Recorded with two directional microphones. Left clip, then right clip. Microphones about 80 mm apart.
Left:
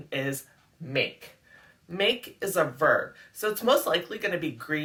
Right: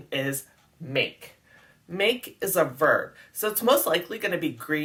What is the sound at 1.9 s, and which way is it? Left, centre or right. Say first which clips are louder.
Speech: right 1 dB; right.